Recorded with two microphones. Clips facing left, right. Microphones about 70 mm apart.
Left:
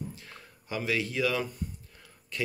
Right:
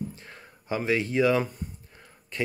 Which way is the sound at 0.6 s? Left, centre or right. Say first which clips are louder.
Right 4 dB; right.